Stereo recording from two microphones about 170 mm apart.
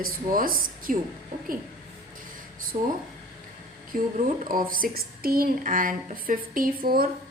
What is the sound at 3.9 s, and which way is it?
A woman's voice, 50° right (ahead or behind).